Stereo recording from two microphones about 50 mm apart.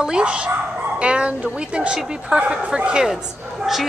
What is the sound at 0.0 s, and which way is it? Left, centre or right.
A woman's voice, centre.